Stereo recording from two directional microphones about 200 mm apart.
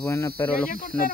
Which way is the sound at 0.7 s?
45° left (ahead or behind).